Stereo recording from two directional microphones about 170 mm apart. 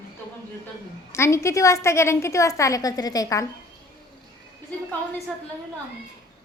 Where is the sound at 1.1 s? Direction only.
15° left (ahead or behind).